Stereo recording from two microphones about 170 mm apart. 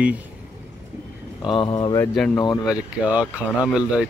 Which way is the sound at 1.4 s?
30° left (ahead or behind).